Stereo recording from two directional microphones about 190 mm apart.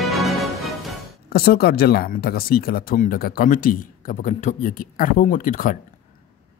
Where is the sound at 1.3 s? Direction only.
55° left (ahead or behind).